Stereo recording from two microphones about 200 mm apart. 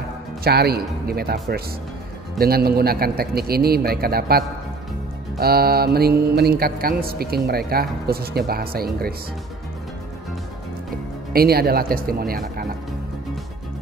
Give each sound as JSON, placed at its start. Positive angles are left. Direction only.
{"t": 0.4, "sound": "speech", "side_deg": -50}
{"t": 11.3, "sound": "speech", "side_deg": -50}